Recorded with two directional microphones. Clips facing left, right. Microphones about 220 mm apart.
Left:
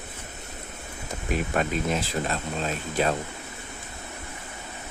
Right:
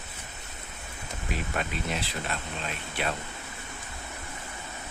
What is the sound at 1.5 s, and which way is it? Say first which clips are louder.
Speech: left 6 dB; 45° left (ahead or behind).